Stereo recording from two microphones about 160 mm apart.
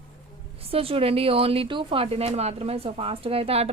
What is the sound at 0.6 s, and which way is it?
Speech, 35° right (ahead or behind).